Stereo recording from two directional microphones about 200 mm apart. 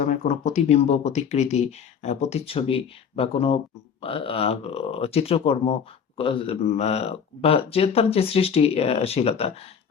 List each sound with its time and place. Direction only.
0.0 s speech: 40° left (ahead or behind)